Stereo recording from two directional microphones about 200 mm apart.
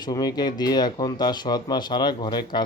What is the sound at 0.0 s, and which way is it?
Speech, 20° left (ahead or behind).